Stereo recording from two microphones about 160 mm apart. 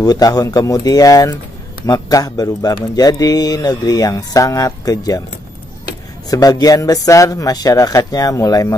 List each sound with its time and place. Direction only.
0.0 s speech: 25° left (ahead or behind)
6.3 s speech: 25° left (ahead or behind)